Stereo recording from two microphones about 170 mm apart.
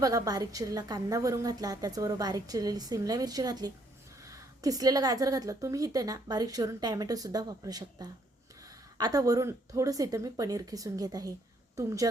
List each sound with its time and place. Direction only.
0.0 s a woman's voice: 20° right (ahead or behind)